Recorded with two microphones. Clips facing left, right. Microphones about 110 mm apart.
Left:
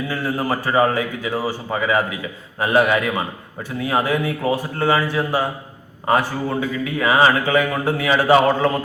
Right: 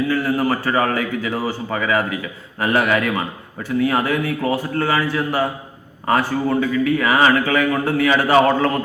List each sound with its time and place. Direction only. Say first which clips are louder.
0.1 s a man's voice: right 3 dB; 20° left (ahead or behind)